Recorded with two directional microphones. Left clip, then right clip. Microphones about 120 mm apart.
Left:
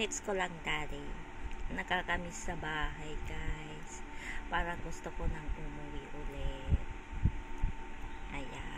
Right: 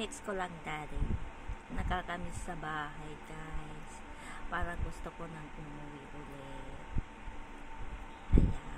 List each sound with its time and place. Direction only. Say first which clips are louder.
0.0 s speech: left 3 dB; 20° right (ahead or behind)
4.3 s speech: left 3 dB; 20° right (ahead or behind)